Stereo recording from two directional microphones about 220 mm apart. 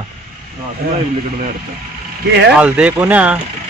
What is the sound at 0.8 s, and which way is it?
Speech, 45° right (ahead or behind).